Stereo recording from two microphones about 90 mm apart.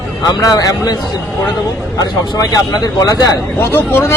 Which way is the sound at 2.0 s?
40° left (ahead or behind).